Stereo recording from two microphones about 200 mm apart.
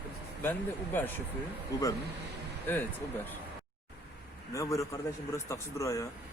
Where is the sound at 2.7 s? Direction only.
10° left (ahead or behind).